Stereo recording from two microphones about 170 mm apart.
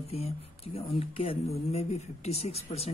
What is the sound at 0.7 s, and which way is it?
Speech, 35° left (ahead or behind).